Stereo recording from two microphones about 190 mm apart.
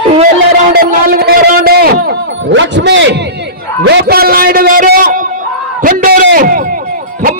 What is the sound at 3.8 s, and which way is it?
A man's voice, 60° right (ahead or behind).